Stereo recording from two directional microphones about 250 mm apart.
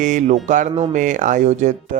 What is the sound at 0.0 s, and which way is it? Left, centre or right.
Speech, right.